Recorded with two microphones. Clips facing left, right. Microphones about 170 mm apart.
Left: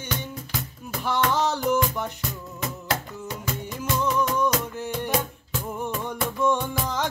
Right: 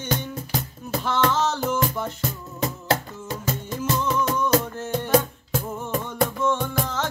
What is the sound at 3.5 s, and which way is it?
Music, 40° right (ahead or behind).